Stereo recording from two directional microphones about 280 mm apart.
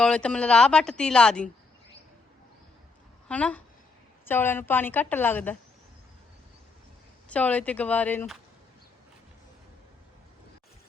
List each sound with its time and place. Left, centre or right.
0.0 s speech: centre
3.2 s a woman's voice: centre
7.3 s speech: centre